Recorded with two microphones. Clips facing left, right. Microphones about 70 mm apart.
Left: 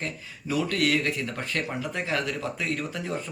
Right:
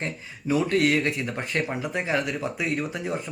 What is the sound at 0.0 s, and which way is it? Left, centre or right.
Speech, right.